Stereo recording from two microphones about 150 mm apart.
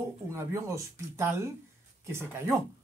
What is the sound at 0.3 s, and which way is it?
Speech, 15° right (ahead or behind).